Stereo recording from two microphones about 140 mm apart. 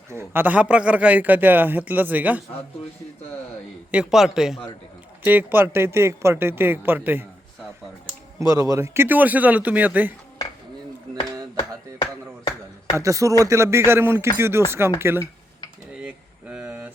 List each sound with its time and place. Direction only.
0.1 s a man's voice: 15° right (ahead or behind)
3.9 s a man's voice: 5° right (ahead or behind)
5.2 s a man's voice: 15° right (ahead or behind)
8.4 s a man's voice: 25° right (ahead or behind)
13.0 s a man's voice: 25° right (ahead or behind)
16.0 s a sound: 5° right (ahead or behind)